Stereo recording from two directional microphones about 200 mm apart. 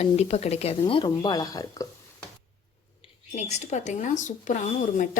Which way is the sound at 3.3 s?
35° left (ahead or behind).